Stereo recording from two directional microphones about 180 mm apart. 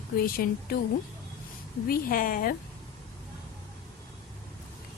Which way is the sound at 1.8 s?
50° left (ahead or behind).